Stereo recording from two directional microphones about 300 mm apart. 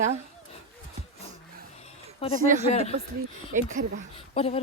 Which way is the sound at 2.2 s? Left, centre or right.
Centre.